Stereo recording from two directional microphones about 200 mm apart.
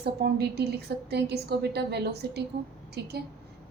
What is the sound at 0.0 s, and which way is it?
A woman's voice, 55° right (ahead or behind).